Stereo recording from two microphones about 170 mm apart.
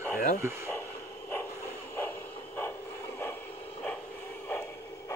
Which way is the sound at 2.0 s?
10° left (ahead or behind).